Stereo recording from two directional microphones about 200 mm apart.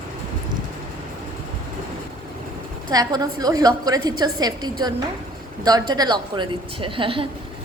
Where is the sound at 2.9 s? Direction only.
20° right (ahead or behind).